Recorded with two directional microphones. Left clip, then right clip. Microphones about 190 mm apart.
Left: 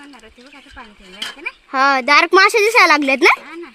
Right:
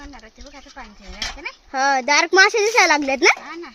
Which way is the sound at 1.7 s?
55° left (ahead or behind).